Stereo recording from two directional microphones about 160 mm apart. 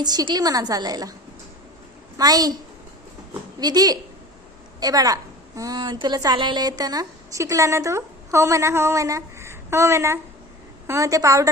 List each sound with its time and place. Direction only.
0.0 s a woman's voice: 25° right (ahead or behind)
2.1 s a woman's voice: 25° right (ahead or behind)
3.6 s a woman's voice: 25° right (ahead or behind)